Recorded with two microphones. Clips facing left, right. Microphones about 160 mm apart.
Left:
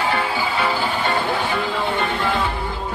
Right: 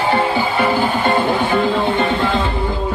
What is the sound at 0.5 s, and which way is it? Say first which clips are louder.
Music: right 5 dB; 50° right (ahead or behind).